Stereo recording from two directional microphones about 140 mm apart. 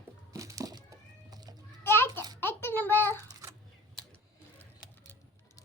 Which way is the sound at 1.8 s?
15° left (ahead or behind).